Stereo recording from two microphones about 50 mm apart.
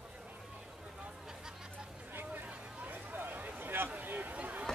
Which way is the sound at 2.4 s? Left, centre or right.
Right.